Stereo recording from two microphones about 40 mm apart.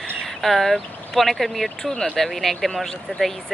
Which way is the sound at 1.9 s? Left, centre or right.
Centre.